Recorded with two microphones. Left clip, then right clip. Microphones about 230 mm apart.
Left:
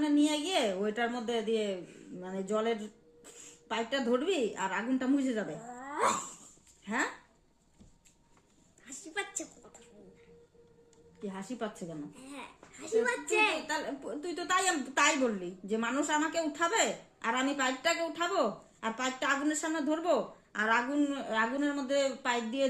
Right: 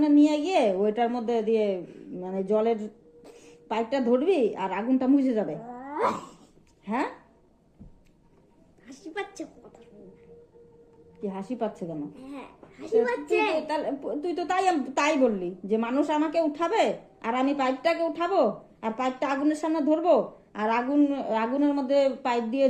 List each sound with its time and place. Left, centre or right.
0.0 s speech: centre
5.8 s cat: centre
6.8 s speech: centre
8.9 s a sound: centre
11.2 s a woman's voice: centre
13.7 s speech: centre